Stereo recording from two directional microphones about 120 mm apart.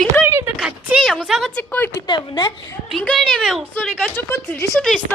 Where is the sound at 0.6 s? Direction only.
5° right (ahead or behind).